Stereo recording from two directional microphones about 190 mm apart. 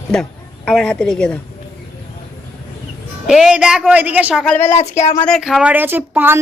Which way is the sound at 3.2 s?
5° right (ahead or behind).